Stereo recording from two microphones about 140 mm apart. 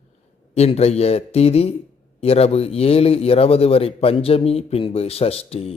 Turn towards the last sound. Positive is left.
turn(degrees=45)  # may be behind; listen again after turning